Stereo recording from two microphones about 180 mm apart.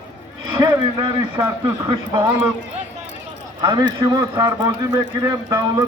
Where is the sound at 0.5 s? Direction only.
20° right (ahead or behind).